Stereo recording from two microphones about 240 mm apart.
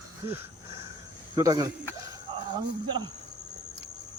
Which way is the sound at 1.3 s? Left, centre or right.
Centre.